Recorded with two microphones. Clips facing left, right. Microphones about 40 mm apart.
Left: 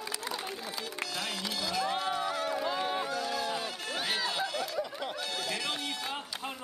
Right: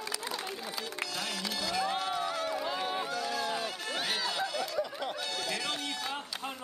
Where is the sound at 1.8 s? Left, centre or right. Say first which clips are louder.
Left 1 dB; centre.